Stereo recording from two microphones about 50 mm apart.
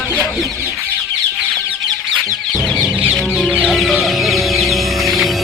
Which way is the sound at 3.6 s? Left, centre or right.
Centre.